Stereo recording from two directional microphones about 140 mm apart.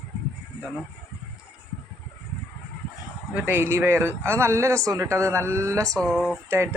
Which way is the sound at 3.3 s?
10° right (ahead or behind).